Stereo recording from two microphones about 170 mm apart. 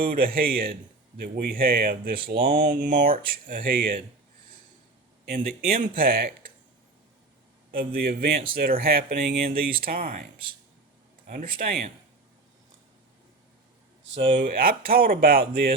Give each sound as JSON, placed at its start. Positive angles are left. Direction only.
{"t": 0.1, "sound": "speech", "side_deg": -60}
{"t": 5.2, "sound": "speech", "side_deg": -65}
{"t": 7.7, "sound": "speech", "side_deg": -55}
{"t": 11.3, "sound": "speech", "side_deg": -50}
{"t": 14.3, "sound": "speech", "side_deg": -55}